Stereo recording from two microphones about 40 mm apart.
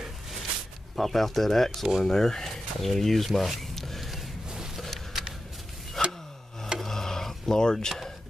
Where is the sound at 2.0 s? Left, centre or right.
Centre.